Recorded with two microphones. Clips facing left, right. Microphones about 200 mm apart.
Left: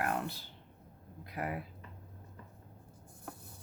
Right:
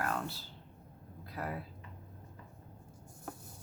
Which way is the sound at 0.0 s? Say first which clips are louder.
Left 2 dB; 15° left (ahead or behind).